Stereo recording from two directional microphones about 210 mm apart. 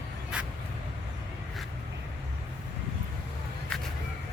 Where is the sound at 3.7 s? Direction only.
5° left (ahead or behind).